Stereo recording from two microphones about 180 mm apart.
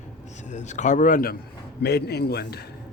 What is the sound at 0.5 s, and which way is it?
Speech, 40° left (ahead or behind).